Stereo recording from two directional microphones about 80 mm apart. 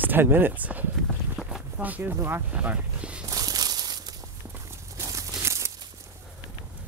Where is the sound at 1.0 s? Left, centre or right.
Centre.